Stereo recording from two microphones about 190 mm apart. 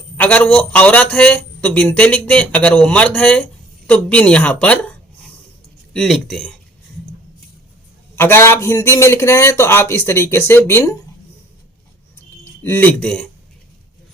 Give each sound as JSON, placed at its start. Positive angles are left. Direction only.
{"t": 0.2, "sound": "a man's voice", "side_deg": 10}
{"t": 8.1, "sound": "a man's voice", "side_deg": 10}
{"t": 12.6, "sound": "a man's voice", "side_deg": 10}